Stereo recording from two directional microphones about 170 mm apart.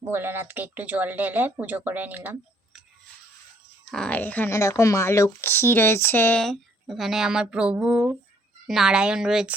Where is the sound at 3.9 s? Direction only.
5° left (ahead or behind).